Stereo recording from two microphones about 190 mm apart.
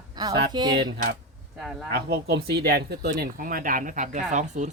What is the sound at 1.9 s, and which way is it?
Speech, 60° right (ahead or behind).